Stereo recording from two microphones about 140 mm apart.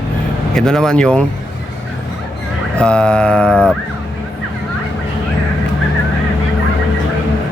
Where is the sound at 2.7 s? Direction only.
5° left (ahead or behind).